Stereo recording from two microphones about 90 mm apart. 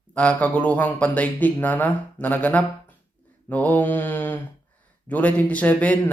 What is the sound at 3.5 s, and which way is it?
Mantra, 20° left (ahead or behind).